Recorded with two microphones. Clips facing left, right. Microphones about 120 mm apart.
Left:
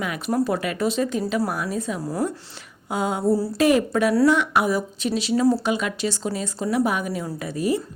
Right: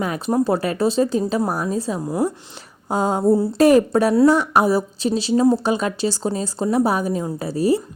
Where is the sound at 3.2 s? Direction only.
20° right (ahead or behind).